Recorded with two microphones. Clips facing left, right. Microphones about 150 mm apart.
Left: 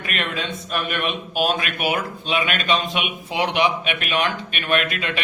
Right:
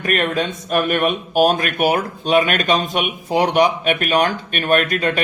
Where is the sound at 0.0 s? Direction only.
45° right (ahead or behind).